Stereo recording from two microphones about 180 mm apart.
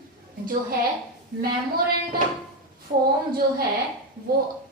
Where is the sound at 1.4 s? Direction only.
55° right (ahead or behind).